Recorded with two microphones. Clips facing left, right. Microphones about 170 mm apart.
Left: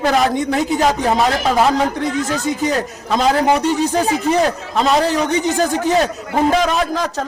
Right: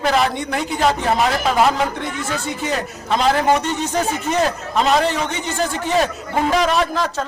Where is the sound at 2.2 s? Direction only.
40° left (ahead or behind).